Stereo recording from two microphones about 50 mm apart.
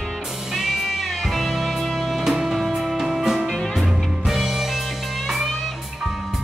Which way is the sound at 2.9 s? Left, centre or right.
Centre.